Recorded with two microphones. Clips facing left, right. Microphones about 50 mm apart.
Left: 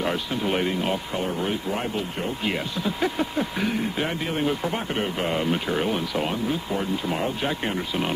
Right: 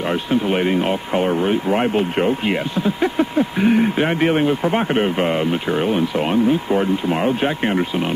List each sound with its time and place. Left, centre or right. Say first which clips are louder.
0.4 s speech: right 3 dB; centre
0.7 s speech: right 7 dB; right
2.4 s speech: right 7 dB; right
3.7 s a man's voice: right 9 dB; right
6.3 s speech: right 10 dB; right